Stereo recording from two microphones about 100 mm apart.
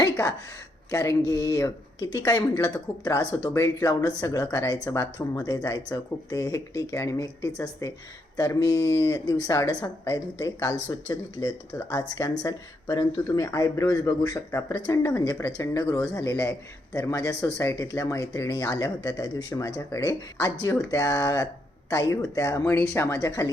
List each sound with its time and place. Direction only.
0.0 s a sound: 35° left (ahead or behind)
0.9 s speech: 30° left (ahead or behind)
14.8 s speech: 40° left (ahead or behind)